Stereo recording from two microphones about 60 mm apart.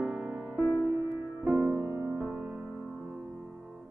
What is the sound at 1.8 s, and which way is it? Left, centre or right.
Music, right.